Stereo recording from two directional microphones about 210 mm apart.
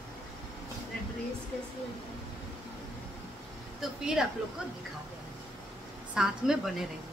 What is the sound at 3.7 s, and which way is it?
Speech, centre (ahead or behind).